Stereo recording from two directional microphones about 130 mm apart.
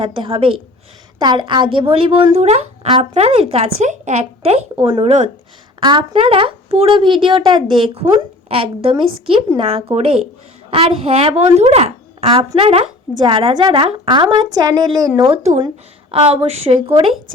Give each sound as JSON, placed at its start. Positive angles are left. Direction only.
{"t": 0.0, "sound": "a woman's voice", "side_deg": -40}
{"t": 4.8, "sound": "speech", "side_deg": -30}
{"t": 5.0, "sound": "speech", "side_deg": -60}
{"t": 5.8, "sound": "a woman's voice", "side_deg": -35}
{"t": 15.1, "sound": "a woman's voice", "side_deg": -40}
{"t": 16.1, "sound": "a woman's voice", "side_deg": -50}